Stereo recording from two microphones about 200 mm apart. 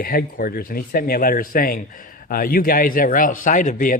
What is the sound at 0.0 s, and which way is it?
Speech, 45° left (ahead or behind).